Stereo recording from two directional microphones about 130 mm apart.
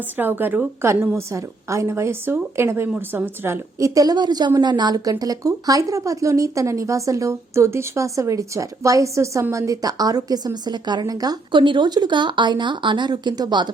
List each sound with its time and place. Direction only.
0.2 s a woman's voice: 15° right (ahead or behind); by 13.7 s 35° right (ahead or behind)